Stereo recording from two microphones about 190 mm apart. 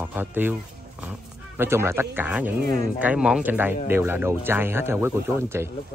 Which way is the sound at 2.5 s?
50° right (ahead or behind).